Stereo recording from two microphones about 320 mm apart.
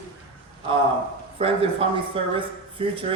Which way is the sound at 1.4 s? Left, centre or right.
Centre.